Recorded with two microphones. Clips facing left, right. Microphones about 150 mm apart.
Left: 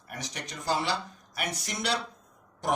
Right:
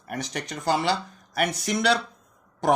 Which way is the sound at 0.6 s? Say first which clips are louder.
Right 5 dB; 65° right (ahead or behind).